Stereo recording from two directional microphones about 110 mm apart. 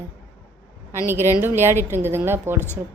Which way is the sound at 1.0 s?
20° right (ahead or behind).